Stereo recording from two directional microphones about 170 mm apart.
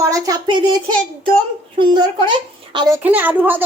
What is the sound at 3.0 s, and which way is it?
Speech, 10° right (ahead or behind).